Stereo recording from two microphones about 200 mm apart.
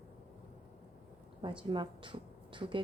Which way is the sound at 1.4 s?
25° right (ahead or behind).